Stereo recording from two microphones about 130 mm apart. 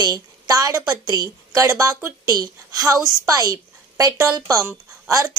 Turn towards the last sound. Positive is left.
turn(degrees=-25)  # may be behind; listen again after turning